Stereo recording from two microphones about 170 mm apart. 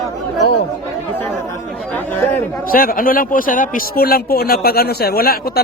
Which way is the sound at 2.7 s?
60° left (ahead or behind).